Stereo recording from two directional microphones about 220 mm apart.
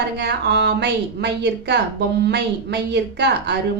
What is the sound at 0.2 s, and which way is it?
A woman's voice, 50° right (ahead or behind).